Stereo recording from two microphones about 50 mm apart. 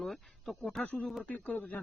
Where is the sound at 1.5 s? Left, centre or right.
Left.